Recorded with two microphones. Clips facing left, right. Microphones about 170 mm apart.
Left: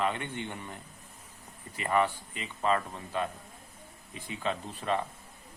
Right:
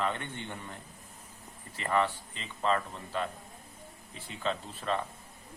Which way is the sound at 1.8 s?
10° left (ahead or behind).